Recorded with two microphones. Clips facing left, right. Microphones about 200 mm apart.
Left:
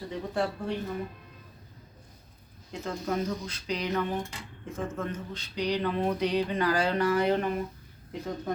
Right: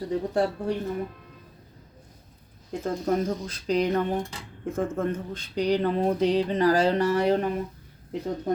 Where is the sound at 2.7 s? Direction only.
50° right (ahead or behind).